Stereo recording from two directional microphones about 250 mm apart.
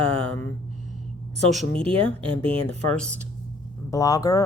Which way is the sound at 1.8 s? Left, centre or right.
Right.